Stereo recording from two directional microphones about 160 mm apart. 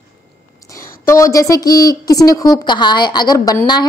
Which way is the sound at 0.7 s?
20° left (ahead or behind).